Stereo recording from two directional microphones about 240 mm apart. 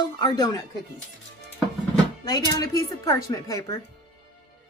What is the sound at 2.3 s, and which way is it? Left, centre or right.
A woman's voice, centre.